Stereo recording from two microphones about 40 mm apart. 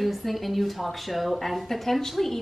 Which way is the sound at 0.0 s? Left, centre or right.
Centre.